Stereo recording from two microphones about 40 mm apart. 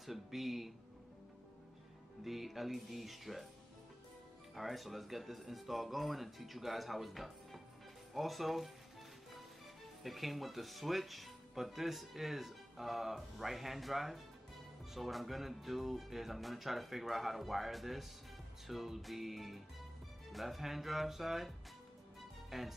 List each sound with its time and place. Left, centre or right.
0.0 s speech: centre
2.2 s speech: centre
4.6 s speech: centre
10.0 s speech: centre